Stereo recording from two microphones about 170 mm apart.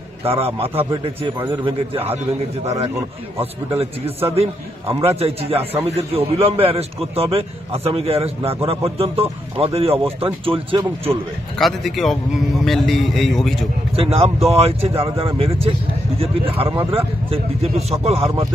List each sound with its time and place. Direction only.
0.2 s a man's voice: 35° right (ahead or behind)
11.5 s a man's voice: centre (ahead or behind)
13.9 s a man's voice: 35° right (ahead or behind)